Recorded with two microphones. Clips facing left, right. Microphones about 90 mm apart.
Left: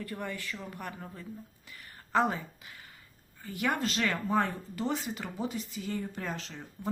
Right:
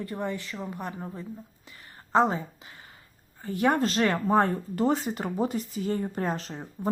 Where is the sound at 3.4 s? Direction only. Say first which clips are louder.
Right 7 dB; 35° right (ahead or behind).